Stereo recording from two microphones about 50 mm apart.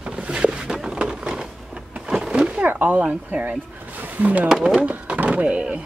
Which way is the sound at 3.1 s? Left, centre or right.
Right.